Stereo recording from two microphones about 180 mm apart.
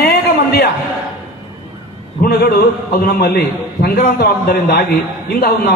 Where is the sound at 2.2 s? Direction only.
65° left (ahead or behind).